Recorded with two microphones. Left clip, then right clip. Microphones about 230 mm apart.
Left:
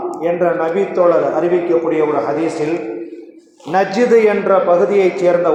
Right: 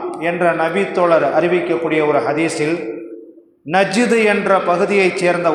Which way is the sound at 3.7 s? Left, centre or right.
Right.